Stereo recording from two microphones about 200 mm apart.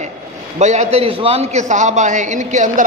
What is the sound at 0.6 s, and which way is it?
A man's voice, 35° right (ahead or behind).